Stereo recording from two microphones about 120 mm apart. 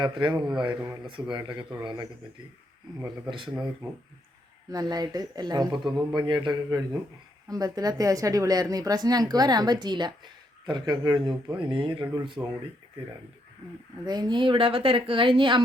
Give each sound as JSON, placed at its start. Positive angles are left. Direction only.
{"t": 0.0, "sound": "a woman's voice", "side_deg": -40}
{"t": 3.2, "sound": "speech", "side_deg": -45}
{"t": 4.7, "sound": "a woman's voice", "side_deg": -35}
{"t": 14.0, "sound": "speech", "side_deg": -35}